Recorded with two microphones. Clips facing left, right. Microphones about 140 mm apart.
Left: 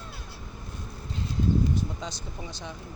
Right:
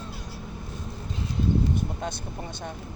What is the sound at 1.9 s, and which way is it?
Speech, 55° right (ahead or behind).